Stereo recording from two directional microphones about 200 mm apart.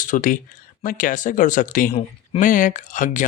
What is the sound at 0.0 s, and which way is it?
Speech, 40° left (ahead or behind).